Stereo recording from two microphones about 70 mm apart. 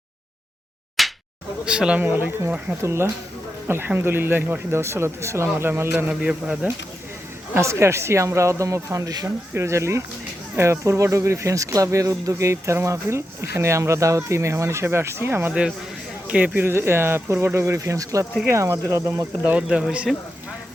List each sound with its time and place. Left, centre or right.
1.0 s a sound: centre
1.6 s speech: centre
2.0 s speech: right
2.8 s speech: right
6.1 s speech: centre
7.5 s speech: right
16.2 s a man's voice: centre
16.6 s speech: right
19.5 s speech: centre